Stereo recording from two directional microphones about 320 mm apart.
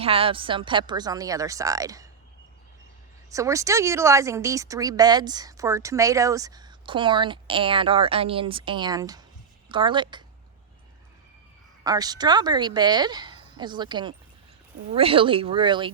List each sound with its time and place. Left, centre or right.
0.0 s a woman's voice: centre
3.3 s a woman's voice: centre
11.8 s a woman's voice: centre